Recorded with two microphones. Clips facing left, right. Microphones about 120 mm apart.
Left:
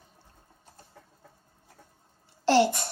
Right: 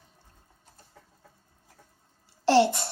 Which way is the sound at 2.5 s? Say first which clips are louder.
Right 1 dB; 25° right (ahead or behind).